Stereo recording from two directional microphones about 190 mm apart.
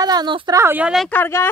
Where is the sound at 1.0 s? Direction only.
10° left (ahead or behind).